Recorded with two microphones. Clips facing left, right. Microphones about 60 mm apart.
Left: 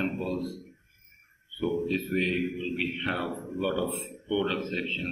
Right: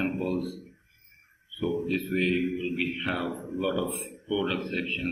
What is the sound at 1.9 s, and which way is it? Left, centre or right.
Speech, centre.